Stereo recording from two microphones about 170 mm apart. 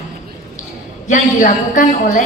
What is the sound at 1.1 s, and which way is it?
A woman's voice, 50° left (ahead or behind).